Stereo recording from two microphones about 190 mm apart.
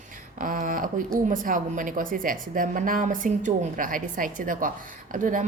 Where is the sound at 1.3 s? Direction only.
45° right (ahead or behind).